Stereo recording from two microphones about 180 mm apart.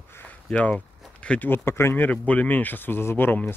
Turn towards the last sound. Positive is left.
turn(degrees=10)  # may be behind; listen again after turning